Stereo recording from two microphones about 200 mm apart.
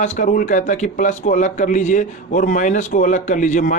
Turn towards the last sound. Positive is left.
turn(degrees=40)  # may be behind; listen again after turning